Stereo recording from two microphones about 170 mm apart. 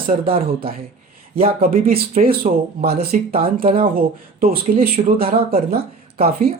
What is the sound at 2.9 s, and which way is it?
Speech, 65° right (ahead or behind).